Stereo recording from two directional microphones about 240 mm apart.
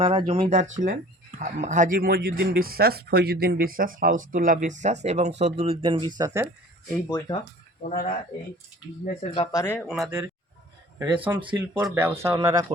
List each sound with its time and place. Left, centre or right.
0.0 s speech: right
7.9 s speech: left
9.2 s speech: left; by 10.2 s centre
11.3 s speech: centre
11.9 s speech: centre